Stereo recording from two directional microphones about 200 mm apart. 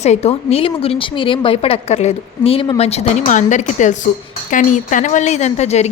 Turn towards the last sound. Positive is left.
turn(degrees=35)  # may be behind; listen again after turning